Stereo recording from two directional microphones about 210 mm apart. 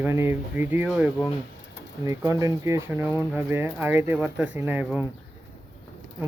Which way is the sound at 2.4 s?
15° right (ahead or behind).